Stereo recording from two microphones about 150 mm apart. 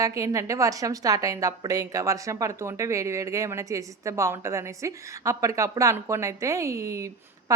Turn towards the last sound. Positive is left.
turn(degrees=-20)  # may be behind; listen again after turning